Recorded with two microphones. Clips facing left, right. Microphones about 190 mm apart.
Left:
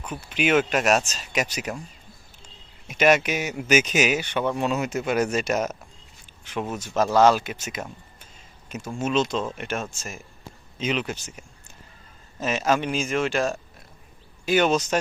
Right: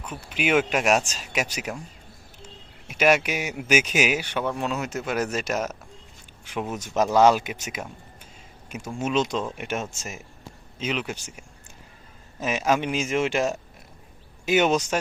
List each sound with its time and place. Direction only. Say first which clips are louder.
0.0 s speech: left 2 dB; 5° right (ahead or behind)
2.8 s speech: left 1 dB; 5° right (ahead or behind)
6.5 s speech: left 1 dB; 15° right (ahead or behind)
9.0 s speech: left 1 dB; 15° right (ahead or behind)
10.8 s speech: left 2 dB; 5° right (ahead or behind)